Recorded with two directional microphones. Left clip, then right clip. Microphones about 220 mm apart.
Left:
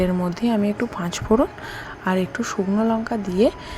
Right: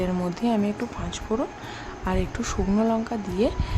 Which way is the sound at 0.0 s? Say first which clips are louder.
Left 4 dB; 15° left (ahead or behind).